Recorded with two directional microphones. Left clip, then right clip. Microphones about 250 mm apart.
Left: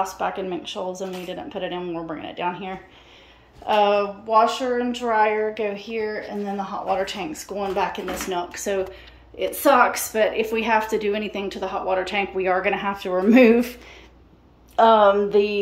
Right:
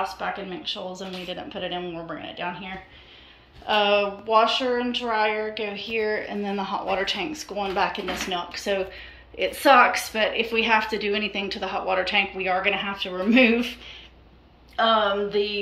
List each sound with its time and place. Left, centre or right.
0.2 s a woman's voice: centre
14.8 s speech: left